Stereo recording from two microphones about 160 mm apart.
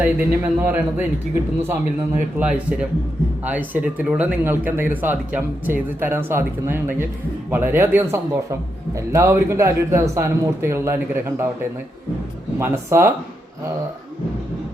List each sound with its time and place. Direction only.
0.0 s speech: 10° right (ahead or behind)
2.4 s speech: 10° right (ahead or behind)
12.5 s speech: 15° right (ahead or behind)